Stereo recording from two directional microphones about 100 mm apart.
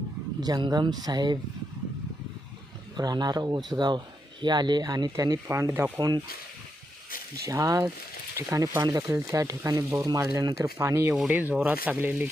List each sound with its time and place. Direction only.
0.4 s speech: 40° right (ahead or behind)
2.9 s speech: 45° right (ahead or behind)
6.0 s speech: 40° right (ahead or behind)
7.4 s speech: 35° right (ahead or behind)
11.3 s speech: 15° right (ahead or behind)